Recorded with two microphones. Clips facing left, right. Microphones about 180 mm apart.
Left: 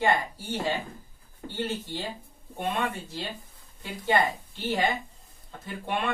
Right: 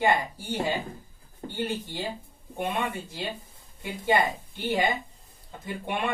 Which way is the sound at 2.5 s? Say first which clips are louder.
Even; 15° right (ahead or behind).